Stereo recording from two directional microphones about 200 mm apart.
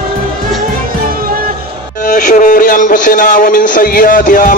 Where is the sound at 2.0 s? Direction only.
40° left (ahead or behind).